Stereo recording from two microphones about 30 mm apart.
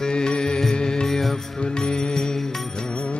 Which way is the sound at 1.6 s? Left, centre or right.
Left.